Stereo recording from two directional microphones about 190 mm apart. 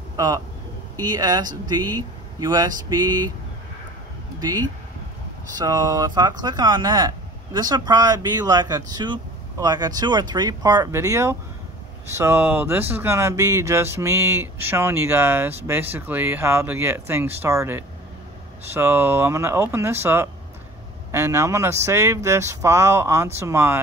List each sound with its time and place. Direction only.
0.1 s vehicle: 20° right (ahead or behind)
0.9 s speech: 20° right (ahead or behind)
5.6 s speech: 20° right (ahead or behind)